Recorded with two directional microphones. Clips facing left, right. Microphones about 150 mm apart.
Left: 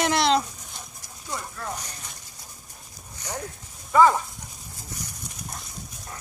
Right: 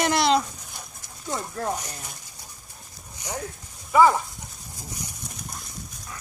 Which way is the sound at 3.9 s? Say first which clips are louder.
Even; 10° right (ahead or behind).